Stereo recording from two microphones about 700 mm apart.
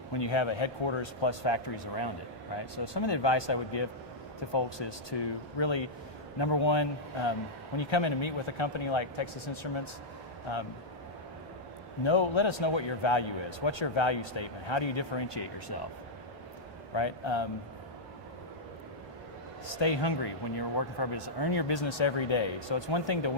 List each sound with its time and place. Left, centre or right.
0.1 s a man's voice: left
12.0 s a man's voice: left
16.9 s a man's voice: left
19.7 s a man's voice: left